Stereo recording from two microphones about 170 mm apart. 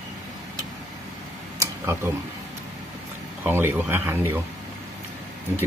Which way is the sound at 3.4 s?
10° right (ahead or behind).